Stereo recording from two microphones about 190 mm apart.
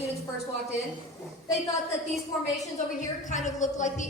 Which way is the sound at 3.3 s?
40° left (ahead or behind).